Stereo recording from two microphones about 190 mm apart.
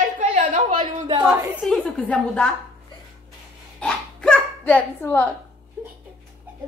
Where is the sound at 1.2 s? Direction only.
10° right (ahead or behind).